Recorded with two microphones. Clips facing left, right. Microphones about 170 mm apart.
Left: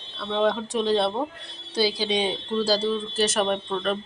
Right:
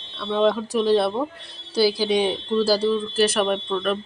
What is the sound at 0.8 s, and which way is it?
Speech, 5° right (ahead or behind).